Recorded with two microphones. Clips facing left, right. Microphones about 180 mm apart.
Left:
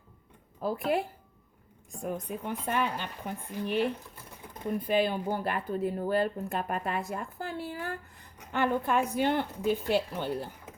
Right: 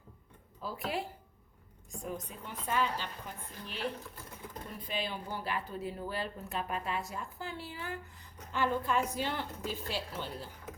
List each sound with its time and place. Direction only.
0.6 s a woman's voice: 55° left (ahead or behind)
2.0 s speech: 55° left (ahead or behind)
4.9 s a woman's voice: 55° left (ahead or behind)